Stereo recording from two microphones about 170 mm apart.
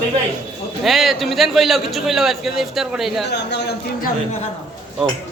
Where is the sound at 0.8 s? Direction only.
Centre (ahead or behind).